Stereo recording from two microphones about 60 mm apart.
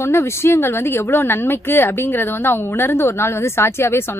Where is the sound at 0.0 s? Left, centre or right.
Left.